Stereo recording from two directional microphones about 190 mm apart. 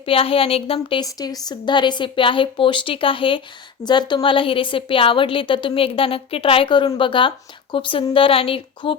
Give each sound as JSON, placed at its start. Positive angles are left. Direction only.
{"t": 0.0, "sound": "a woman's voice", "side_deg": 30}